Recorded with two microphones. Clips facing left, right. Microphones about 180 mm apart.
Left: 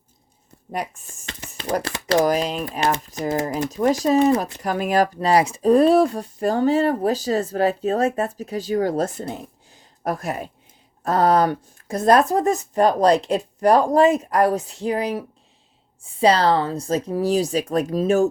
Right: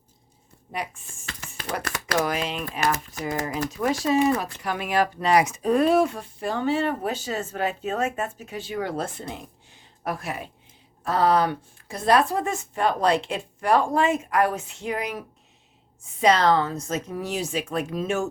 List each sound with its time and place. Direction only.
0.7 s speech: 40° left (ahead or behind)
4.0 s speech: 40° left (ahead or behind)